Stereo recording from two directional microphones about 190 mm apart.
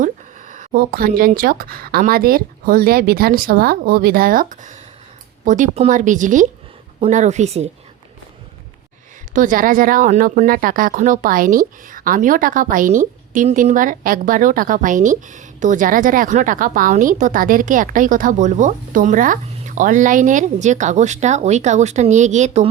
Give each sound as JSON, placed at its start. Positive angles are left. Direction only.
{"t": 0.0, "sound": "speech", "side_deg": -40}
{"t": 9.3, "sound": "speech", "side_deg": -45}